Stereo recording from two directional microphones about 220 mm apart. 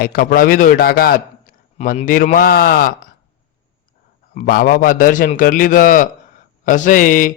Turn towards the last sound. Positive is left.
turn(degrees=35)  # may be behind; listen again after turning